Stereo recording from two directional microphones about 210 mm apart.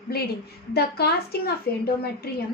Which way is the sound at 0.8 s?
50° left (ahead or behind).